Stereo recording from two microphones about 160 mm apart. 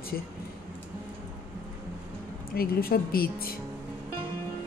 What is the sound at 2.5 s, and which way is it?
A woman's voice, 70° left (ahead or behind).